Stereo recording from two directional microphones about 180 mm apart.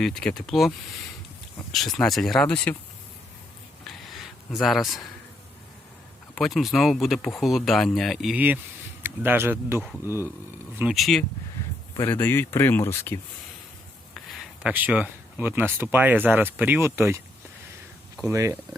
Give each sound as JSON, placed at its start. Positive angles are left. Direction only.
{"t": 0.0, "sound": "speech", "side_deg": 5}
{"t": 1.7, "sound": "speech", "side_deg": 0}
{"t": 3.8, "sound": "a sound", "side_deg": 0}
{"t": 6.3, "sound": "speech", "side_deg": 0}
{"t": 10.8, "sound": "speech", "side_deg": -5}
{"t": 11.9, "sound": "speech", "side_deg": 10}
{"t": 14.3, "sound": "a sound", "side_deg": 0}
{"t": 14.7, "sound": "speech", "side_deg": -10}
{"t": 18.2, "sound": "speech", "side_deg": -15}